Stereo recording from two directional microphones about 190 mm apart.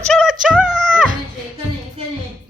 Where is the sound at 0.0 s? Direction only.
5° left (ahead or behind).